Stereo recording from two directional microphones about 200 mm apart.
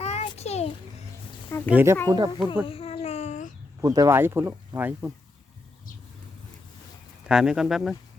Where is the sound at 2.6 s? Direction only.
30° left (ahead or behind).